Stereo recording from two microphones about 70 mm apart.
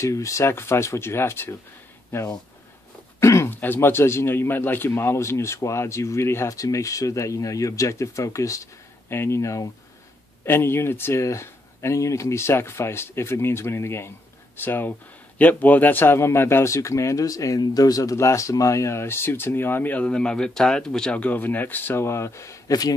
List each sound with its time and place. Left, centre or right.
0.0 s speech: left
3.2 s speech: left
3.4 s a man's voice: left
10.4 s speech: left
22.7 s speech: left